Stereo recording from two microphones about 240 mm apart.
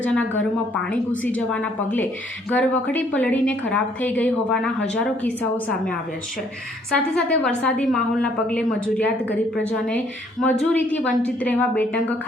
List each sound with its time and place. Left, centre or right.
0.0 s a woman's voice: centre
6.9 s a woman's voice: centre